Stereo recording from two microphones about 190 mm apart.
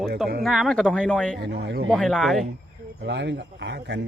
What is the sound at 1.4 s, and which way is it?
Speech, 65° right (ahead or behind).